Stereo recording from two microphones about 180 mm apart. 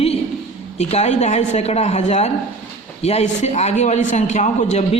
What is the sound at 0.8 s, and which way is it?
A man's voice, 35° left (ahead or behind).